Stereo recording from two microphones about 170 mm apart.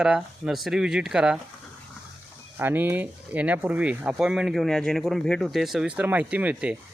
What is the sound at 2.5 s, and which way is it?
Speech, 10° right (ahead or behind).